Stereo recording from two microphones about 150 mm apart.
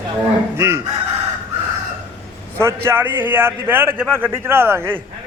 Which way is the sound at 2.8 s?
15° right (ahead or behind).